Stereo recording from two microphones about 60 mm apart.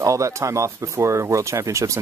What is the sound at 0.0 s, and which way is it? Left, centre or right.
Speech, right.